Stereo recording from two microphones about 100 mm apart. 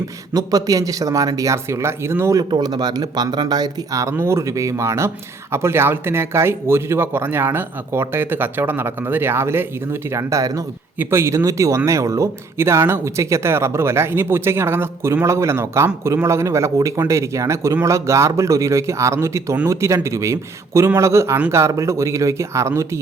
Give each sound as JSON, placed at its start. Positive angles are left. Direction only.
{"t": 0.3, "sound": "speech", "side_deg": -35}
{"t": 2.4, "sound": "speech", "side_deg": -45}
{"t": 4.1, "sound": "speech", "side_deg": -25}
{"t": 10.9, "sound": "speech", "side_deg": -20}